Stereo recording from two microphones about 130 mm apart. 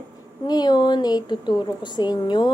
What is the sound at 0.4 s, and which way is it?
A woman's voice, 30° left (ahead or behind).